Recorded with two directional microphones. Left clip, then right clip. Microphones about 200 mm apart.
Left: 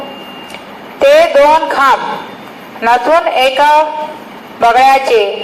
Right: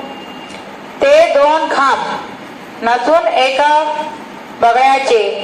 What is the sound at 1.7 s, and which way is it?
A man's voice, 55° left (ahead or behind).